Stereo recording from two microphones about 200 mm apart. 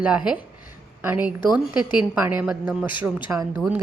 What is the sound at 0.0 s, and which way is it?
A woman's voice, 5° right (ahead or behind).